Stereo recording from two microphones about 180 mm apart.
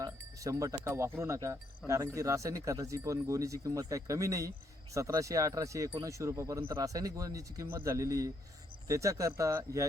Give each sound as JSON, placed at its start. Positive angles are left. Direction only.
{"t": 0.0, "sound": "speech", "side_deg": -20}